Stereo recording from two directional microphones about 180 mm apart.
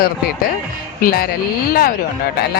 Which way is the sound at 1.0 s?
55° left (ahead or behind).